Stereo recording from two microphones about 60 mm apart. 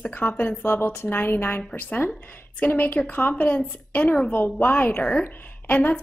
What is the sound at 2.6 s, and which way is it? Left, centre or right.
A woman's voice, left.